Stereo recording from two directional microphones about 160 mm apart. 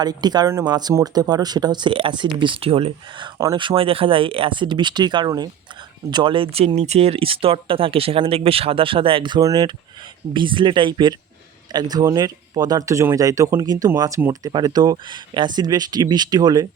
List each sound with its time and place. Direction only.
0.0 s speech: 25° right (ahead or behind)